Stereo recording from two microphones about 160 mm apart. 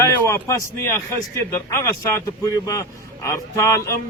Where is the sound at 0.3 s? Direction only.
20° left (ahead or behind).